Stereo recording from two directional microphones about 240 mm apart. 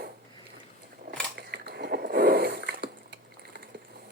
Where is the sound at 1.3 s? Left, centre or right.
Right.